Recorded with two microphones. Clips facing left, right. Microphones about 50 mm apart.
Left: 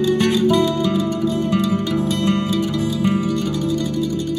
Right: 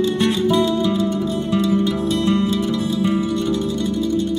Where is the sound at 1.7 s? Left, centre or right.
Left.